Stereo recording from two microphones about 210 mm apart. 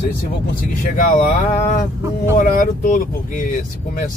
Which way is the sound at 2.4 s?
40° left (ahead or behind).